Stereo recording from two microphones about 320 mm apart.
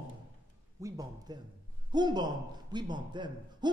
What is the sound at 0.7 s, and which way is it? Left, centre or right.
A man's voice, centre.